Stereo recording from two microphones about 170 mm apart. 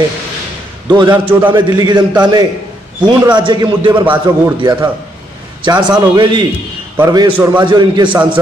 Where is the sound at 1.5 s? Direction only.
25° right (ahead or behind).